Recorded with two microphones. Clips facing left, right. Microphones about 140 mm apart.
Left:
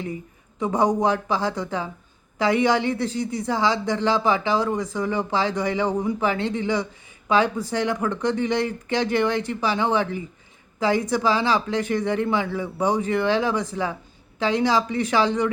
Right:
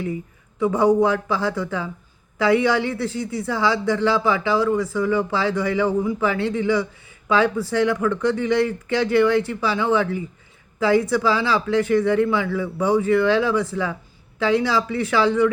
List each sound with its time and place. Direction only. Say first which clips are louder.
0.6 s a woman's voice: right 4 dB; 15° left (ahead or behind)